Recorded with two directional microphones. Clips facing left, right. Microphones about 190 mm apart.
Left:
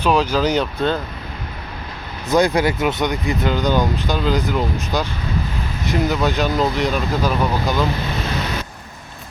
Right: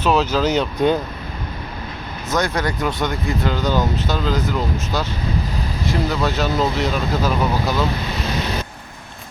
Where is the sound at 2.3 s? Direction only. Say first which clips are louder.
Left 5 dB; 15° left (ahead or behind).